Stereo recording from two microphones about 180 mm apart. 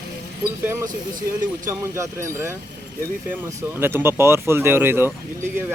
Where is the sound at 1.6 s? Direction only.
15° right (ahead or behind).